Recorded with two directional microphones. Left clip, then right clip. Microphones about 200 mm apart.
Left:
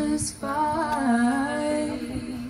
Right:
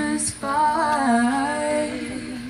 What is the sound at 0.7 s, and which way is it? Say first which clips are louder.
Music: right 5 dB; 50° left (ahead or behind).